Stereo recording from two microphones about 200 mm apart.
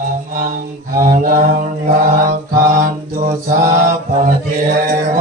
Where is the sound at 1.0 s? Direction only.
45° right (ahead or behind).